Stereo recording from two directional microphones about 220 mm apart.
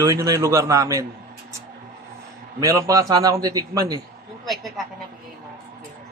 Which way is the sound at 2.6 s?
15° right (ahead or behind).